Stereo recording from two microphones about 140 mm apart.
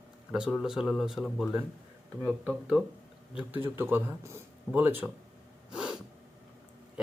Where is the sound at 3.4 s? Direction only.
15° right (ahead or behind).